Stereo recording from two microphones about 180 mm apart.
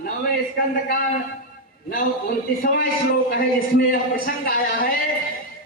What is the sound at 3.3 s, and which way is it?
A man's voice, 55° left (ahead or behind).